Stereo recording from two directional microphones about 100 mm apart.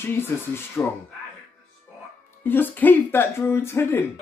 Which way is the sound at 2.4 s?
20° left (ahead or behind).